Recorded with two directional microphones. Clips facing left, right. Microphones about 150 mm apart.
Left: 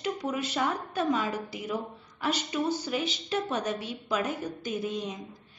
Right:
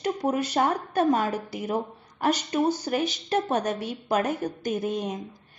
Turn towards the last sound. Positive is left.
turn(degrees=-50)  # may be behind; listen again after turning